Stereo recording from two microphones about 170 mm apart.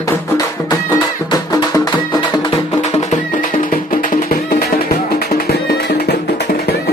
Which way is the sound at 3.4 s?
55° left (ahead or behind).